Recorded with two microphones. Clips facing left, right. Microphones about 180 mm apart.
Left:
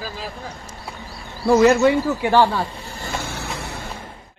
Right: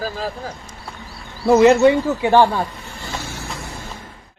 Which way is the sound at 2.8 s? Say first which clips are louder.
Left 1 dB; 40° left (ahead or behind).